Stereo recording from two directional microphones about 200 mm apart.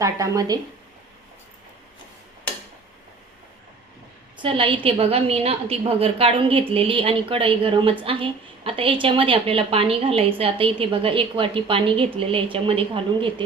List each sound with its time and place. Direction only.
0.0 s speech: 15° right (ahead or behind)
4.4 s a woman's voice: 25° right (ahead or behind)